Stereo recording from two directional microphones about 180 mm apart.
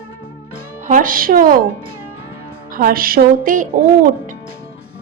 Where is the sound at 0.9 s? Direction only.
50° right (ahead or behind).